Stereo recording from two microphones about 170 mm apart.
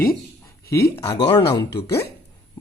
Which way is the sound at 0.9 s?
15° left (ahead or behind).